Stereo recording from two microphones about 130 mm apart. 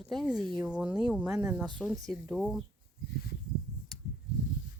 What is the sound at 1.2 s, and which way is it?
Speech, 25° right (ahead or behind).